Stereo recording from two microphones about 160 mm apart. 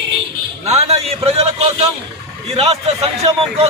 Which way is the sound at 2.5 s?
40° right (ahead or behind).